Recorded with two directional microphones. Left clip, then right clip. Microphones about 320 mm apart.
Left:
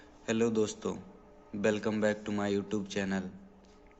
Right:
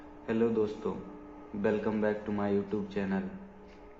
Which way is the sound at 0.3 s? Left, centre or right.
Left.